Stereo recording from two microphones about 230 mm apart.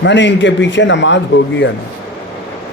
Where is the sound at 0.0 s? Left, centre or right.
Left.